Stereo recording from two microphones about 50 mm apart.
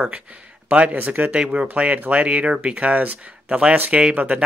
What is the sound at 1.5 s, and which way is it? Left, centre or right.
Speech, right.